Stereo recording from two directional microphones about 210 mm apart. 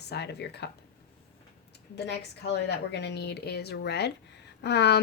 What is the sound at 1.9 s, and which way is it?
Speech, 55° left (ahead or behind).